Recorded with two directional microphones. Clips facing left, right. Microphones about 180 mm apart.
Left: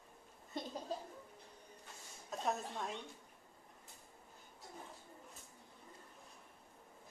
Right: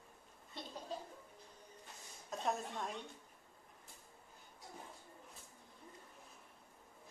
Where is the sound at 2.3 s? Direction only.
Centre (ahead or behind).